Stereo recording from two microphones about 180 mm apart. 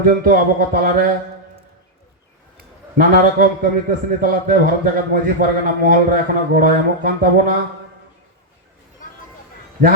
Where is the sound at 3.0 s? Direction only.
50° right (ahead or behind).